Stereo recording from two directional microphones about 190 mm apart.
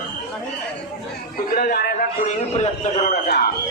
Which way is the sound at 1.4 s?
55° left (ahead or behind).